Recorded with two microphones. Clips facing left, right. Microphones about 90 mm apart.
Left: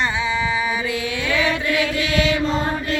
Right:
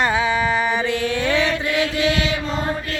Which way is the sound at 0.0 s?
50° right (ahead or behind).